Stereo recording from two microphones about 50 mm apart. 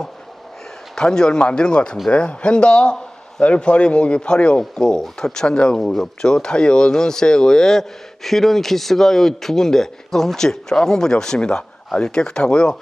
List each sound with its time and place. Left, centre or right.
0.9 s speech: centre
5.8 s speech: centre